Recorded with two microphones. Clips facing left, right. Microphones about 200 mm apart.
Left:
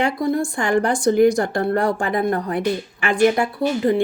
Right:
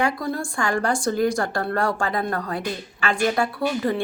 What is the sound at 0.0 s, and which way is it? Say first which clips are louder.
Speech: left 4 dB; 20° left (ahead or behind).